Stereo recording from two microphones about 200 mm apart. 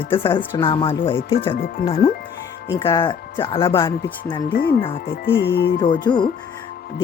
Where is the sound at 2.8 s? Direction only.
20° left (ahead or behind).